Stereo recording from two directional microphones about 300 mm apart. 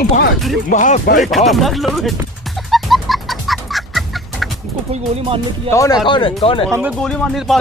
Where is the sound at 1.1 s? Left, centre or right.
Centre.